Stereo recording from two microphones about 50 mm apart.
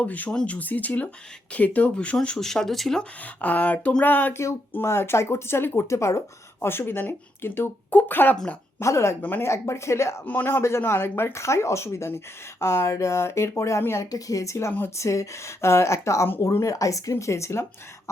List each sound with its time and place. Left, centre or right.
0.0 s speech: left
2.2 s speech: centre
3.4 s speech: left
4.8 s speech: left
5.9 s speech: left
6.7 s speech: left
7.9 s speech: left
8.8 s speech: left
10.2 s speech: left
10.6 s speech: left
14.4 s a woman's voice: left